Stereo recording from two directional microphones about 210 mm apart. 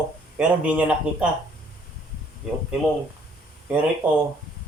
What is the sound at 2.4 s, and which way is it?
Speech, centre (ahead or behind).